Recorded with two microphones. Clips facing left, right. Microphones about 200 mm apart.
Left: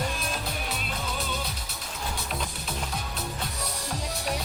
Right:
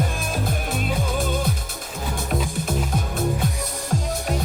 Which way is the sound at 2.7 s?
50° right (ahead or behind).